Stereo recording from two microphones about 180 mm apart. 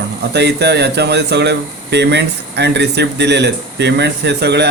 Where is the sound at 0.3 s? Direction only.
70° right (ahead or behind).